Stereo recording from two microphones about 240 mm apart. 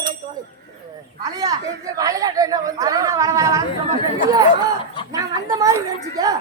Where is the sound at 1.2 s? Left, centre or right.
Centre.